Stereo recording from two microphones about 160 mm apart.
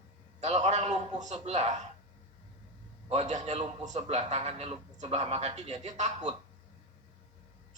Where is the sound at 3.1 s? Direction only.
45° right (ahead or behind).